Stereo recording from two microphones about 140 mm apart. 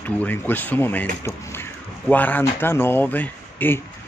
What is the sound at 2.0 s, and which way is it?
A man's voice, 10° left (ahead or behind).